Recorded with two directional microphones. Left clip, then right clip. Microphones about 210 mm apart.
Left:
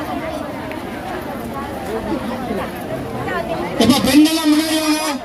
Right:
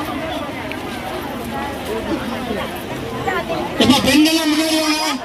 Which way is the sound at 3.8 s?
65° left (ahead or behind).